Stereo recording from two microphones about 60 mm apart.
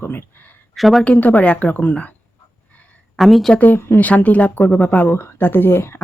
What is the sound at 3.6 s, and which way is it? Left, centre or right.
Speech, left.